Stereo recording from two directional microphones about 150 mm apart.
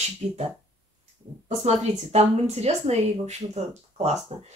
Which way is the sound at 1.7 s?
45° right (ahead or behind).